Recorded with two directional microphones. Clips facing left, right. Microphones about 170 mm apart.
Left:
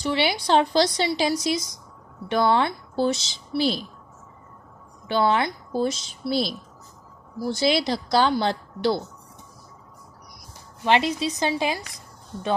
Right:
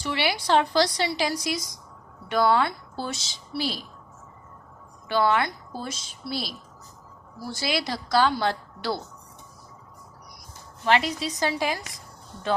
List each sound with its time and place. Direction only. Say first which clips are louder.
0.0 s a woman's voice: left 3 dB; 25° left (ahead or behind)
5.0 s a woman's voice: left 1 dB; 25° left (ahead or behind)
10.8 s a woman's voice: left 2 dB; 20° left (ahead or behind)